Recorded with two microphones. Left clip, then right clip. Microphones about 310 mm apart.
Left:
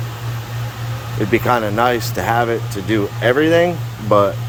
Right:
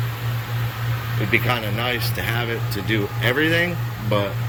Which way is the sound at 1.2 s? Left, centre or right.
Centre.